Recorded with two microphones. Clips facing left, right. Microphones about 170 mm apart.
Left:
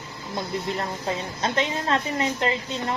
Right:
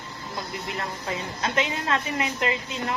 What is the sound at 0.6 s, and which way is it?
A woman's voice, 30° left (ahead or behind).